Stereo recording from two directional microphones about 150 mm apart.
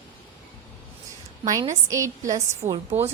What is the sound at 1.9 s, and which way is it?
Speech, 20° right (ahead or behind).